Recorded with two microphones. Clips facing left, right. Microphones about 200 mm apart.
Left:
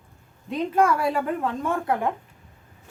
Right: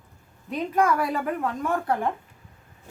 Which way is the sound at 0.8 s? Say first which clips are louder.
Left 2 dB; 30° left (ahead or behind).